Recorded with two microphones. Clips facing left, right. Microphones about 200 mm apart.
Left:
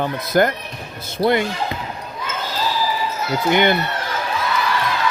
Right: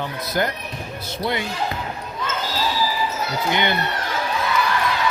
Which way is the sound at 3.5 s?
50° left (ahead or behind).